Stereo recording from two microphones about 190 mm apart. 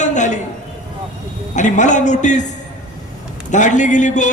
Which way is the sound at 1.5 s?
40° left (ahead or behind).